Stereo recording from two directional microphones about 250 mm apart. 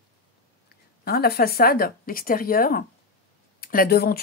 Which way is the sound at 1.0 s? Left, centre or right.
Left.